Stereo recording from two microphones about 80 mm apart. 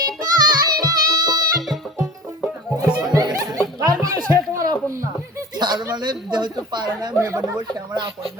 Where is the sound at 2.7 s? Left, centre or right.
Right.